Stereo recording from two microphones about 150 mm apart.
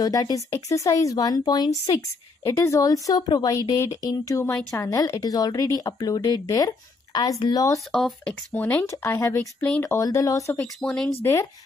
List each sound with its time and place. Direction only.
0.0 s speech: 25° left (ahead or behind)
7.9 s speech: 5° left (ahead or behind)
8.8 s speech: 20° left (ahead or behind)
10.8 s speech: 5° left (ahead or behind)